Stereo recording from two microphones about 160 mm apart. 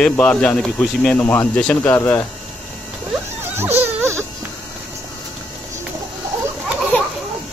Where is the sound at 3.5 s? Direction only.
15° right (ahead or behind).